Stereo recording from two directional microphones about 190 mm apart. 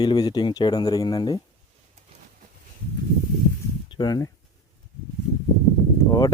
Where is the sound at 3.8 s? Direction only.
20° left (ahead or behind).